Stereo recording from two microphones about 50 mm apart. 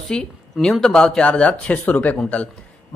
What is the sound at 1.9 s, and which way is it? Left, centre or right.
Speech, left.